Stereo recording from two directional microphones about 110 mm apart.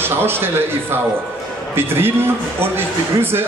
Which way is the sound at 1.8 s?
20° right (ahead or behind).